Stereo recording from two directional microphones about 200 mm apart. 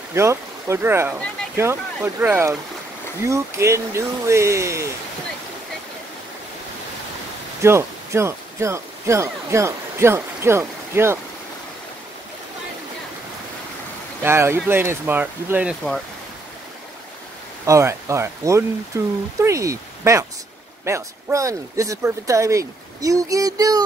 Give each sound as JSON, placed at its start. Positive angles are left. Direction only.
{"t": 0.1, "sound": "speech", "side_deg": -15}
{"t": 7.6, "sound": "speech", "side_deg": -15}
{"t": 14.2, "sound": "speech", "side_deg": -15}
{"t": 17.6, "sound": "speech", "side_deg": -15}